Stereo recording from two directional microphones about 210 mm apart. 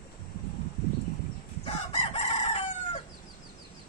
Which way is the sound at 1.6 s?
30° left (ahead or behind).